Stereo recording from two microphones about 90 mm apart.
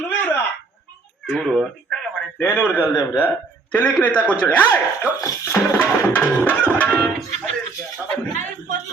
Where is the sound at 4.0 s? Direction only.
15° left (ahead or behind).